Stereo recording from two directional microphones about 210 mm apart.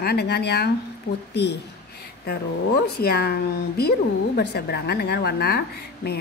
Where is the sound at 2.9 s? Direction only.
50° left (ahead or behind).